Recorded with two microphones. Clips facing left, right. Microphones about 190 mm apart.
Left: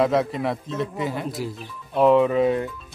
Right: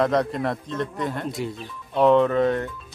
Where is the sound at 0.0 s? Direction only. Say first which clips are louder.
Left 1 dB; 5° left (ahead or behind).